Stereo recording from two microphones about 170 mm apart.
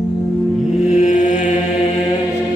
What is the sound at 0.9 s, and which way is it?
Mantra, 50° left (ahead or behind).